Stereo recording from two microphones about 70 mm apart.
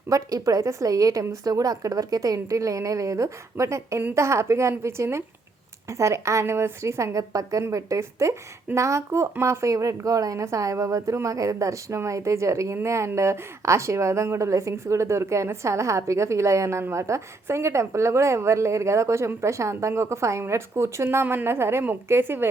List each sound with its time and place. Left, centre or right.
0.1 s a woman's voice: right